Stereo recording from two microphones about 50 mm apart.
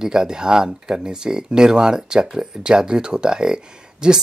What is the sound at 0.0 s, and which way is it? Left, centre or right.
Speech, centre.